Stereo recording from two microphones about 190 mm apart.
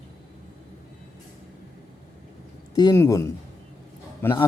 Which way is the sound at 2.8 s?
15° left (ahead or behind).